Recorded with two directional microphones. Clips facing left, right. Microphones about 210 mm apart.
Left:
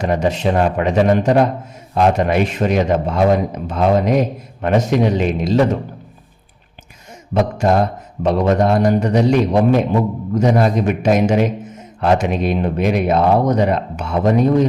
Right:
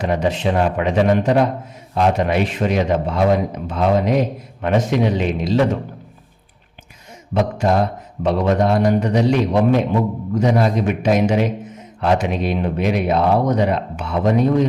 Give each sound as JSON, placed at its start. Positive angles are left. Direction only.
{"t": 0.0, "sound": "speech", "side_deg": 45}
{"t": 7.3, "sound": "speech", "side_deg": 50}